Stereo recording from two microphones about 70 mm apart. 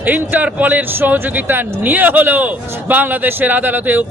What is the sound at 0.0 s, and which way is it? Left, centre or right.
Speech, right.